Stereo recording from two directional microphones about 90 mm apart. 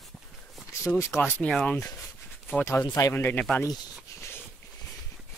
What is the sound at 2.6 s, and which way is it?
Speech, 30° left (ahead or behind).